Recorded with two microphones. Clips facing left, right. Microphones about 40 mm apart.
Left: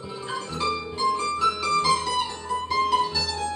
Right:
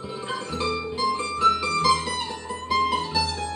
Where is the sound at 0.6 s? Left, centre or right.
Centre.